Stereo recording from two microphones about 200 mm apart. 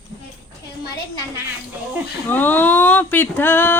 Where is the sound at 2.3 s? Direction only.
10° left (ahead or behind).